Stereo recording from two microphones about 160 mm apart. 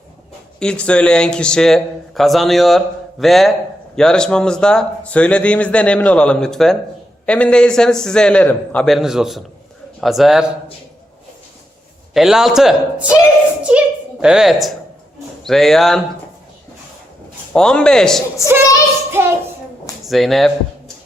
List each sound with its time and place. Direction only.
0.6 s a man's voice: 5° left (ahead or behind)
12.1 s a man's voice: centre (ahead or behind)
17.5 s a man's voice: 5° left (ahead or behind)
18.4 s child singing: 20° left (ahead or behind)
19.2 s child singing: 15° right (ahead or behind)
20.1 s a man's voice: centre (ahead or behind)